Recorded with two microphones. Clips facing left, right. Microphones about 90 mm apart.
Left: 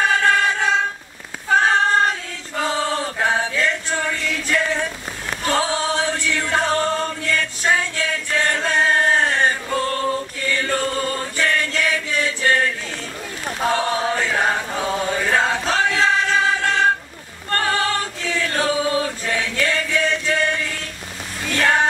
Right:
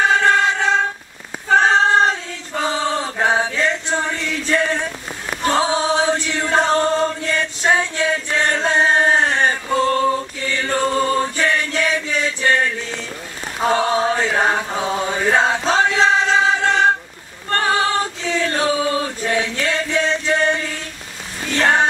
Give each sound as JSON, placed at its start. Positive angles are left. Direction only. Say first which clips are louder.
{"t": 0.0, "sound": "a sound", "louder": "right 2 dB", "side_deg": -20}
{"t": 3.2, "sound": "chant", "louder": "right 3 dB", "side_deg": -20}
{"t": 13.7, "sound": "chant", "louder": "right 4 dB", "side_deg": -20}
{"t": 17.5, "sound": "choir", "louder": "right 3 dB", "side_deg": -20}
{"t": 18.9, "sound": "chant", "louder": "right 1 dB", "side_deg": -20}
{"t": 21.5, "sound": "music", "louder": "right 2 dB", "side_deg": -20}